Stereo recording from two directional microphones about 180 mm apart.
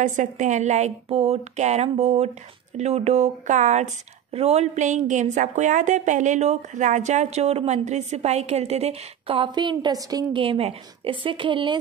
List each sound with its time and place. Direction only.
0.0 s a woman's voice: 45° right (ahead or behind); by 11.8 s 25° right (ahead or behind)